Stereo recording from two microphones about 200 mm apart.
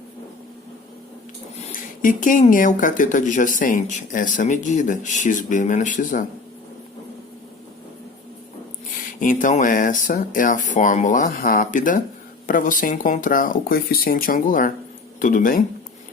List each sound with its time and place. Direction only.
1.7 s speech: 40° left (ahead or behind)
9.2 s speech: 40° left (ahead or behind)